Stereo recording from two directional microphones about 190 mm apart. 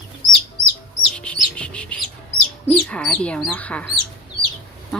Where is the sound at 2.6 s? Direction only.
5° left (ahead or behind).